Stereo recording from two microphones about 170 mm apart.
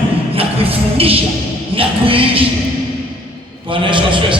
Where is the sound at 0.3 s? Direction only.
35° right (ahead or behind).